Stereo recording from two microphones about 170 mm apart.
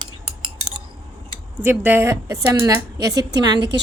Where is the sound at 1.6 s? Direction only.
10° right (ahead or behind).